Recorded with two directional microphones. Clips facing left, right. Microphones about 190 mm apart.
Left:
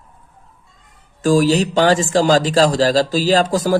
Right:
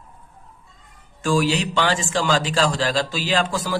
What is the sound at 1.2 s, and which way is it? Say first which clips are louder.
A man's voice: left 6 dB; 40° left (ahead or behind).